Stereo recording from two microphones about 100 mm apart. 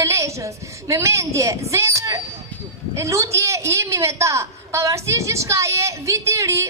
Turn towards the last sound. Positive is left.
turn(degrees=-30)  # may be behind; listen again after turning